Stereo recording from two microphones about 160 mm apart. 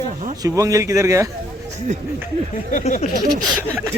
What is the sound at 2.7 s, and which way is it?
Speech, 50° left (ahead or behind).